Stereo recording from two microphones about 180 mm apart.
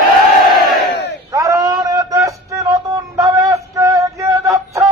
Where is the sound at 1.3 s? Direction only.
20° right (ahead or behind).